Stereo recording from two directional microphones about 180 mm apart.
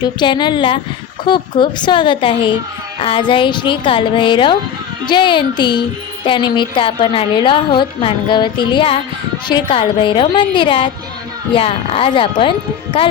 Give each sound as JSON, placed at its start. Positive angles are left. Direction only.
{"t": 0.0, "sound": "a woman's voice", "side_deg": 25}